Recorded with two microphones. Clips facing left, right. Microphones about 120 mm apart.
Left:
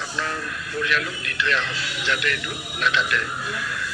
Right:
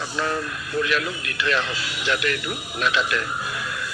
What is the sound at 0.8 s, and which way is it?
Speech, 10° right (ahead or behind).